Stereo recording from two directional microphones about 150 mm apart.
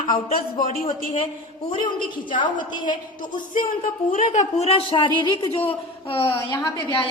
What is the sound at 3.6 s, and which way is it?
A woman's voice, 65° left (ahead or behind).